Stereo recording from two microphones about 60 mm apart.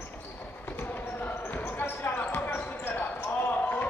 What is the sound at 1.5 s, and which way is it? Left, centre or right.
Basketball bounce, left.